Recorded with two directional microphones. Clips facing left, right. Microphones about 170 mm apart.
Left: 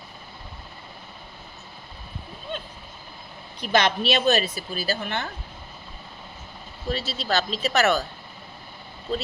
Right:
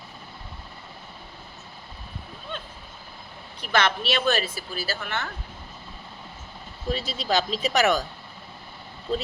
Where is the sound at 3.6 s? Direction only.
15° left (ahead or behind).